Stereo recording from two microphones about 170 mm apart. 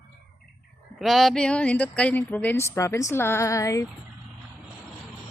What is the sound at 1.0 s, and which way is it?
Speech, centre (ahead or behind).